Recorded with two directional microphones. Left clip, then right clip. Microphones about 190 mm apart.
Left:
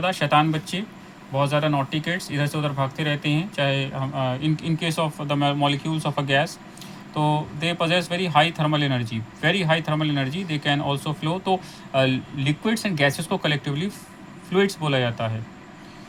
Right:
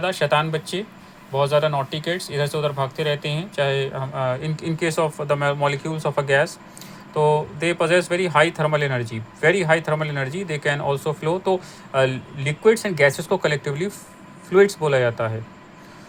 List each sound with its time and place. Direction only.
0.0 s speech: 25° right (ahead or behind)
7.6 s speech: 25° right (ahead or behind)